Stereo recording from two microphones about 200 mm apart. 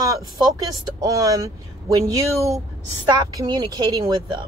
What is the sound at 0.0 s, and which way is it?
A woman's voice, 15° right (ahead or behind).